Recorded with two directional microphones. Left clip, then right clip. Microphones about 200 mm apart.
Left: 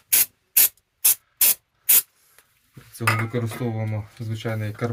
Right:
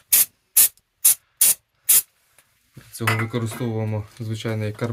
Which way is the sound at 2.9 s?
25° right (ahead or behind).